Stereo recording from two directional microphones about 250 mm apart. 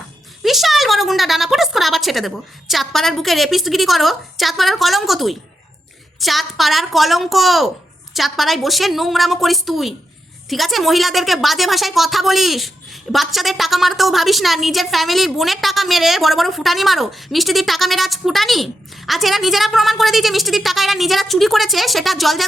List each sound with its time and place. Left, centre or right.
0.4 s a woman's voice: centre